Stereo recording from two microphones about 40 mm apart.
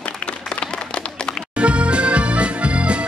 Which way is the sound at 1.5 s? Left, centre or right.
Right.